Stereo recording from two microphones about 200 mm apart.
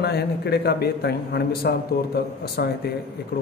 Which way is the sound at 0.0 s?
55° left (ahead or behind).